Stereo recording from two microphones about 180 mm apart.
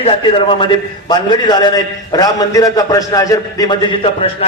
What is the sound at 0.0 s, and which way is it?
A man's voice, 30° left (ahead or behind).